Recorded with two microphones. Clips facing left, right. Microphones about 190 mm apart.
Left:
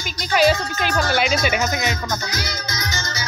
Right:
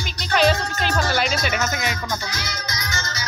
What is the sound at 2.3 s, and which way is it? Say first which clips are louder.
Music: left 3 dB; 35° left (ahead or behind).